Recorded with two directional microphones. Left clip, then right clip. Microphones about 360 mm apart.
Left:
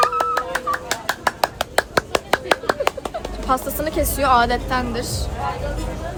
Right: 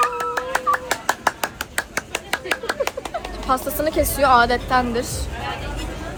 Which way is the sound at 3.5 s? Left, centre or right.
Centre.